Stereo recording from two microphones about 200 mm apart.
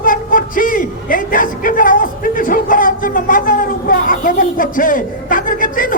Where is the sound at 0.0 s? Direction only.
45° left (ahead or behind).